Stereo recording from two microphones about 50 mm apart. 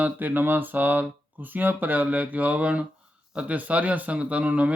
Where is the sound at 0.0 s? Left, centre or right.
Right.